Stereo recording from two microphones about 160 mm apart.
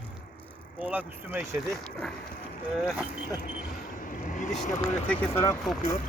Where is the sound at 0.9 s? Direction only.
10° right (ahead or behind).